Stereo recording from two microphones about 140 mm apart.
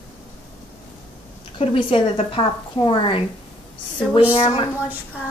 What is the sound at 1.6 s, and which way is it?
Speech, 40° left (ahead or behind).